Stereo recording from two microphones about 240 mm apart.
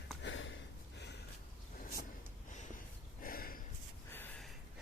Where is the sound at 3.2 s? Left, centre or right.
Left.